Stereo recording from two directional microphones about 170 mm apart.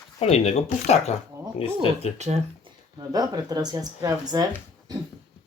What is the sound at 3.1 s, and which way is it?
Speech, 20° right (ahead or behind).